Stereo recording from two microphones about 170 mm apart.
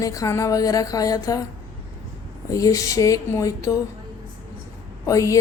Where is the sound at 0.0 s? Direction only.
20° left (ahead or behind).